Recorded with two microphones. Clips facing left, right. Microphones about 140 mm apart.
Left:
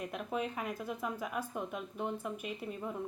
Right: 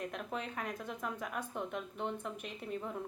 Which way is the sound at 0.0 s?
5° left (ahead or behind).